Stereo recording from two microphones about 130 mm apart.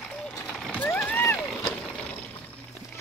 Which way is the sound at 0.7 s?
15° left (ahead or behind).